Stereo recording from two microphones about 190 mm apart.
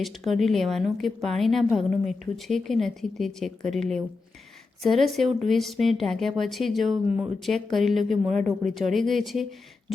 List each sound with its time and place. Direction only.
0.0 s a woman's voice: centre (ahead or behind)